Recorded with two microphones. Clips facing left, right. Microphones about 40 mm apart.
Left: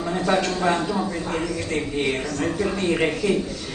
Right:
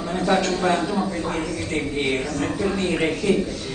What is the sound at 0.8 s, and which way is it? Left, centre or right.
A man's voice, centre.